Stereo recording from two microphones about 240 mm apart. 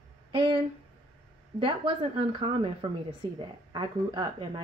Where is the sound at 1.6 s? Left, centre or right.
Right.